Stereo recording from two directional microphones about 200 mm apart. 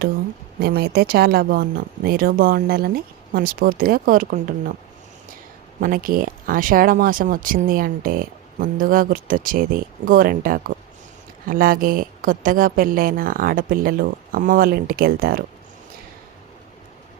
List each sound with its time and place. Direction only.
0.6 s a woman's voice: 50° right (ahead or behind)
5.8 s a woman's voice: 45° right (ahead or behind)